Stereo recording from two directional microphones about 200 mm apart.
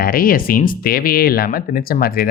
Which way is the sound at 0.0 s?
45° left (ahead or behind).